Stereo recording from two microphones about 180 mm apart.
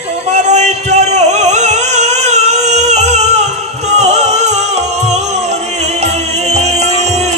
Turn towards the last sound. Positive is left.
turn(degrees=-40)  # may be behind; listen again after turning